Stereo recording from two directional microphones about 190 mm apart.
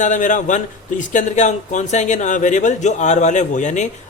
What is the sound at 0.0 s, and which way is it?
Speech, 40° left (ahead or behind).